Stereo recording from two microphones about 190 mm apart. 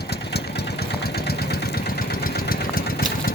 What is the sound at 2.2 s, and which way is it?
Engine, 50° left (ahead or behind).